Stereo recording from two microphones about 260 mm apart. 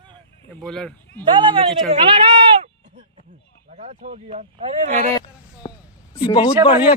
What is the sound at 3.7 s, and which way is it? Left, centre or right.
Speech, right.